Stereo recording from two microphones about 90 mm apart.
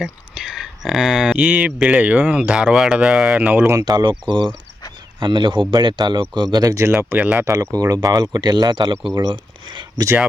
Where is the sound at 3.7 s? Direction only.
45° right (ahead or behind).